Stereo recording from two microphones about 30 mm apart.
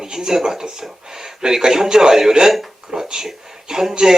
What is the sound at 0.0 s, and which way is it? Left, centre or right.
A man's voice, centre.